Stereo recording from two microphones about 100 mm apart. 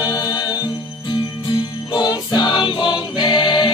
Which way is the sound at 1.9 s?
45° left (ahead or behind).